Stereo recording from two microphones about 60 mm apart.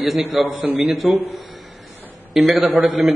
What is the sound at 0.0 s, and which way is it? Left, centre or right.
A man's voice, centre.